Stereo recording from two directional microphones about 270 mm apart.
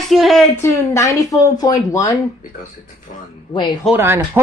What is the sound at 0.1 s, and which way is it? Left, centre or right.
Speech, centre.